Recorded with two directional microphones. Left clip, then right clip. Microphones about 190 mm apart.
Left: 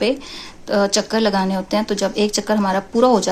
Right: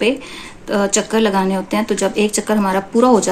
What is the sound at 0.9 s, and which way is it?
Speech, 45° left (ahead or behind).